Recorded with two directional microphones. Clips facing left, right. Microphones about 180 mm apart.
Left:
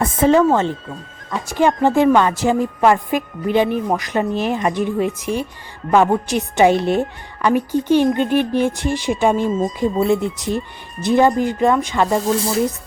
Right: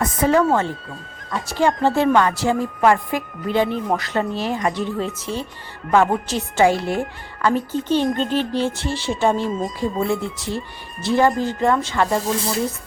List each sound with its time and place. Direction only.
0.0 s speech: 25° left (ahead or behind)
1.5 s a woman's voice: 15° left (ahead or behind)